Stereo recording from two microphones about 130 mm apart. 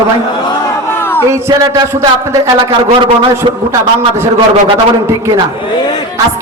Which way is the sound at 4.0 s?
20° right (ahead or behind).